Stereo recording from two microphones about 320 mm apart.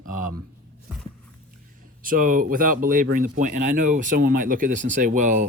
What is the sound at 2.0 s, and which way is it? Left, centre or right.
Speech, right.